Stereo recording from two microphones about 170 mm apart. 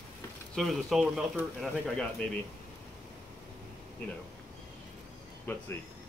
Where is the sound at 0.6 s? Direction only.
Centre (ahead or behind).